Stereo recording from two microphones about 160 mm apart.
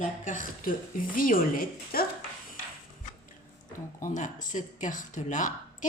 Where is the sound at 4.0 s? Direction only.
55° left (ahead or behind).